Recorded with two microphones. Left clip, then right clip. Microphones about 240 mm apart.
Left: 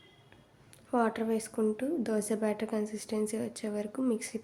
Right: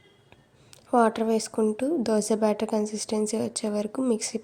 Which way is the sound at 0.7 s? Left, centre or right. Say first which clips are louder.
Right 8 dB; right.